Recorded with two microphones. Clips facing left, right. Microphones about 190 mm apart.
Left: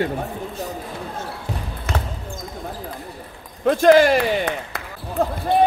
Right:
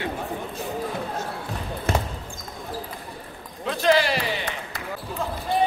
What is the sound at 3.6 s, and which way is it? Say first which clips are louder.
Speech: left 8 dB; 50° left (ahead or behind).